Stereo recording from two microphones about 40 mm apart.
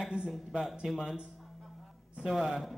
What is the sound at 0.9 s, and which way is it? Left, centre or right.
Speech, centre.